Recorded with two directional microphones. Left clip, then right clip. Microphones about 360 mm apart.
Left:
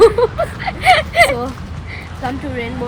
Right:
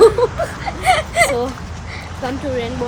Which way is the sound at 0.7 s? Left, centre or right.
Left.